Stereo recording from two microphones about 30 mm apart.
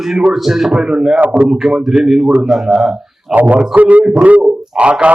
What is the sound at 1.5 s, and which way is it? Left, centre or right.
Speech, centre.